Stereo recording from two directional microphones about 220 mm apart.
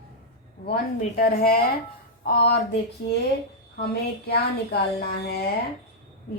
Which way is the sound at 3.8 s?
45° left (ahead or behind).